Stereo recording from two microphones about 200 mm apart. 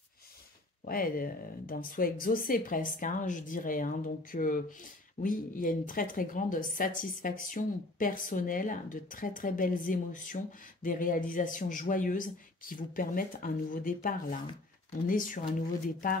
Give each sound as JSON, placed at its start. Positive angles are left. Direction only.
{"t": 0.8, "sound": "speech", "side_deg": 45}